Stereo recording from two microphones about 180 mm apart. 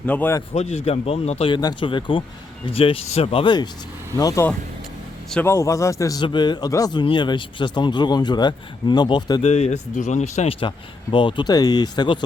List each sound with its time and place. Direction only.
0.0 s a man's voice: 10° left (ahead or behind)
0.5 s a man's voice: 35° left (ahead or behind)
9.4 s a man's voice: 35° left (ahead or behind)